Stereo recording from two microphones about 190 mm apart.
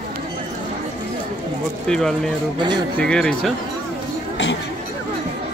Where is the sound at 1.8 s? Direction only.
5° left (ahead or behind).